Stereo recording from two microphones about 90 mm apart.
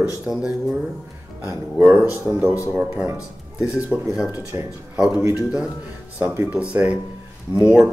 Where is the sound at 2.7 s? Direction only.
15° right (ahead or behind).